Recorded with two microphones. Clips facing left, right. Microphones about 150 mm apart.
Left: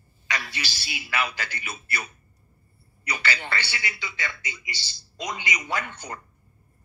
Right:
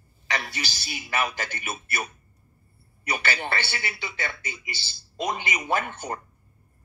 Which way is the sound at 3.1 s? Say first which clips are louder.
Right 2 dB; 50° right (ahead or behind).